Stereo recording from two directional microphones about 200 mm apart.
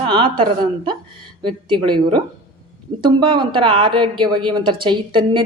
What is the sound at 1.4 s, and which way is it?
Speech, 25° right (ahead or behind).